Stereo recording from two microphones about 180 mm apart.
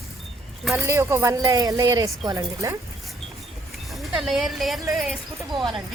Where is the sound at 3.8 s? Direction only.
Centre (ahead or behind).